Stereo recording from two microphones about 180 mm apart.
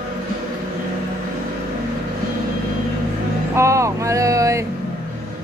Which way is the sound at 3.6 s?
15° right (ahead or behind).